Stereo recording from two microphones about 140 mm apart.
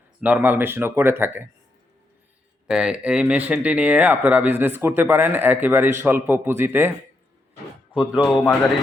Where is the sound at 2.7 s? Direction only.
5° right (ahead or behind).